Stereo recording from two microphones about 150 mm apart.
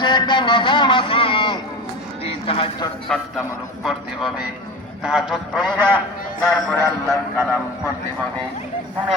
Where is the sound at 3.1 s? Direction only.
5° left (ahead or behind).